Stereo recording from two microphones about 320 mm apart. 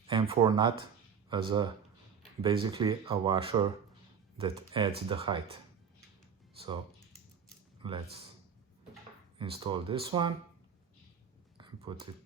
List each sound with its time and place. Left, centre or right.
0.1 s speech: centre
7.8 s speech: centre
9.4 s speech: centre
11.5 s a sound: centre